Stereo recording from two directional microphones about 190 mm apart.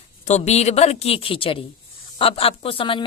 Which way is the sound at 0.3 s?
35° left (ahead or behind).